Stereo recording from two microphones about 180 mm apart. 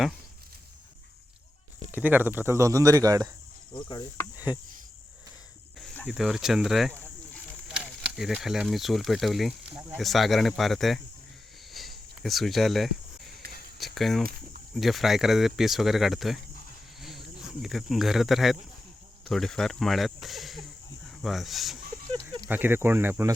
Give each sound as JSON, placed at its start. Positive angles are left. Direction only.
{"t": 1.9, "sound": "speech", "side_deg": -10}
{"t": 3.7, "sound": "speech", "side_deg": 25}
{"t": 5.8, "sound": "cricket", "side_deg": 10}
{"t": 6.1, "sound": "speech", "side_deg": 0}
{"t": 11.7, "sound": "cricket", "side_deg": 0}
{"t": 13.7, "sound": "speech", "side_deg": 0}
{"t": 22.4, "sound": "speech", "side_deg": -10}